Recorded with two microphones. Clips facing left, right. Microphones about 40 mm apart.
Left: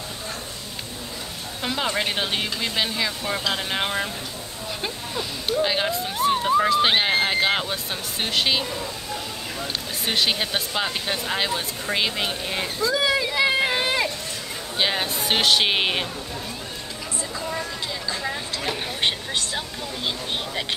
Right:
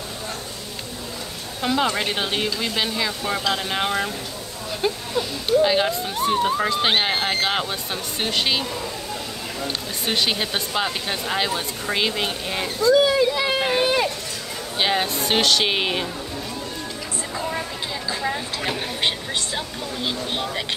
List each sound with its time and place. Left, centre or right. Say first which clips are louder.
1.6 s speech: right 3 dB; centre
10.0 s speech: even; centre
13.1 s a sound: right 1 dB; centre
14.8 s speech: right 2 dB; centre
17.4 s a sound: right 3 dB; centre
18.1 s speech: right 3 dB; centre